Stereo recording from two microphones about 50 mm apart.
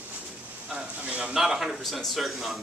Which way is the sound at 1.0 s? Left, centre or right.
Right.